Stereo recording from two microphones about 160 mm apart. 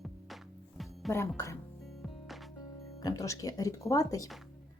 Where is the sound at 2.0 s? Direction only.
Centre (ahead or behind).